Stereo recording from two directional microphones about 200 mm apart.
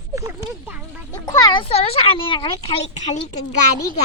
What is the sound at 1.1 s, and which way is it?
Speech, 20° left (ahead or behind).